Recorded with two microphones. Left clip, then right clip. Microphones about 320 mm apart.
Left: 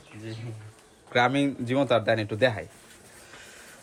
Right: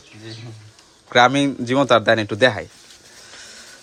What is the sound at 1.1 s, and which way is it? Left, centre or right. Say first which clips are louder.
A man's voice: right 9 dB; centre.